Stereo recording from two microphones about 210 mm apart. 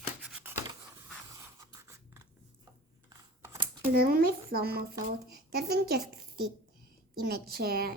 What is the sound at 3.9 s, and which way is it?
Speech, 45° right (ahead or behind).